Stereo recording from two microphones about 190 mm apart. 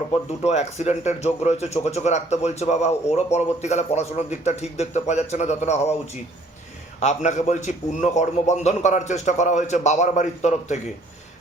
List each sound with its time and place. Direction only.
0.3 s speech: 35° left (ahead or behind)
7.0 s speech: 40° left (ahead or behind)